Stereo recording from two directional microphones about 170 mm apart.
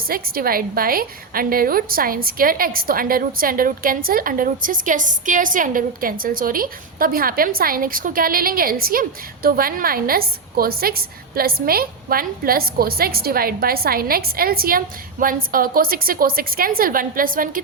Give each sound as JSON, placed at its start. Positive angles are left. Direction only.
{"t": 0.1, "sound": "a woman's voice", "side_deg": -60}